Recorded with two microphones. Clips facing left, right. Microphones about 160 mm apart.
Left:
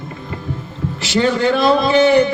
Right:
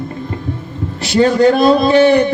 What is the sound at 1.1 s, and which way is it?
A man's voice, 40° right (ahead or behind).